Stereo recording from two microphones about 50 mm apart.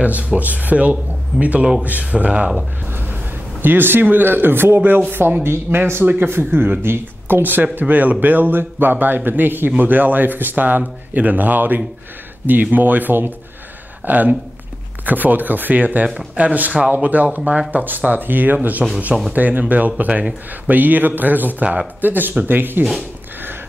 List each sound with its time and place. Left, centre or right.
0.0 s speech: right
2.9 s a sound: right
3.6 s speech: right